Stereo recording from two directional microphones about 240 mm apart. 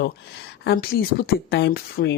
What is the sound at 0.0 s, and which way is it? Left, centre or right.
Speech, left.